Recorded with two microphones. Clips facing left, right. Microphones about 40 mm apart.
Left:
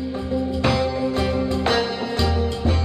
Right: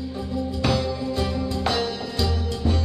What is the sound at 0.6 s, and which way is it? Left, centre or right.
Music, left.